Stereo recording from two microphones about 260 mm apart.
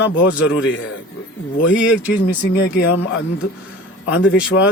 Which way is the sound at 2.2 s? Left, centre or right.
Left.